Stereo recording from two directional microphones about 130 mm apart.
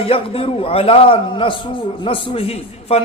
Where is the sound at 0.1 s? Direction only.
45° left (ahead or behind).